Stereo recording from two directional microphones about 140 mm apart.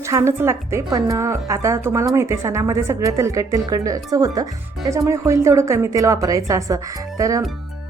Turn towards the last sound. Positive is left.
turn(degrees=-25)  # may be behind; listen again after turning